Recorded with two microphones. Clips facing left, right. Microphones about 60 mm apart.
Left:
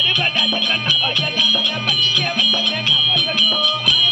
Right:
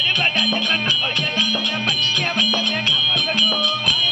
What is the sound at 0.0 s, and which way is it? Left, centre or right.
Music, right.